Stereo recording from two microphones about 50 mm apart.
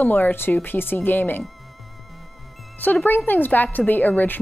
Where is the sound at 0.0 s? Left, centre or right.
Left.